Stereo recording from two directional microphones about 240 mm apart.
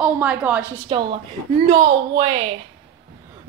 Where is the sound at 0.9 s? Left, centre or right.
Right.